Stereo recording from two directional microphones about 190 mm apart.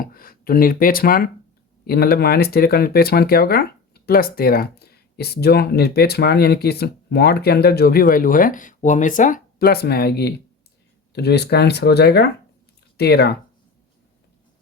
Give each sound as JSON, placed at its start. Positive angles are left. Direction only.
{"t": 0.0, "sound": "speech", "side_deg": 50}